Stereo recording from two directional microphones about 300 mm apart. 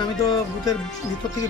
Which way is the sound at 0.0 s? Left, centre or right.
Centre.